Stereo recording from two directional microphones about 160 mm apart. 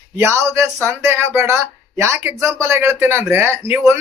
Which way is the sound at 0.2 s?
15° right (ahead or behind).